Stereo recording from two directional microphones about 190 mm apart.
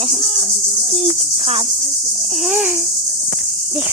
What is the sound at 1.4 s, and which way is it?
Cricket, 30° right (ahead or behind).